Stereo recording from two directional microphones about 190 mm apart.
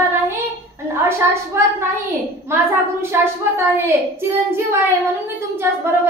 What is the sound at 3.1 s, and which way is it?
A child's voice, 10° right (ahead or behind).